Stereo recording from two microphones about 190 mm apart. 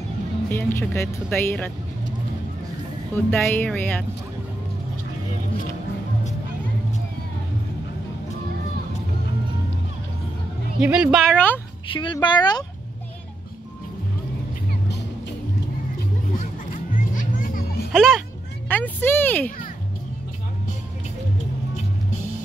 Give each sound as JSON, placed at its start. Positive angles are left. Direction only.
{"t": 0.5, "sound": "speech", "side_deg": 10}
{"t": 3.2, "sound": "speech", "side_deg": 10}
{"t": 10.8, "sound": "speech", "side_deg": -5}
{"t": 11.9, "sound": "speech", "side_deg": 25}
{"t": 16.3, "sound": "music", "side_deg": 45}
{"t": 17.9, "sound": "speech", "side_deg": 0}
{"t": 18.7, "sound": "a sound", "side_deg": 10}